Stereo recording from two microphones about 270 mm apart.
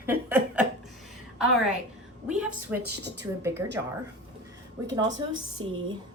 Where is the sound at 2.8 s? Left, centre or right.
Right.